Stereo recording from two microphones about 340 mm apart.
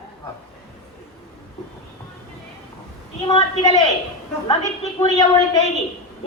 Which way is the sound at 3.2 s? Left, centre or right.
Centre.